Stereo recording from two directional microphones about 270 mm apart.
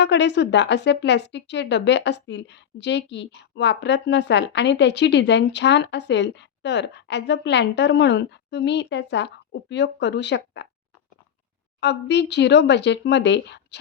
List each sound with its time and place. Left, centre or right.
0.0 s a woman's voice: left
11.8 s a woman's voice: left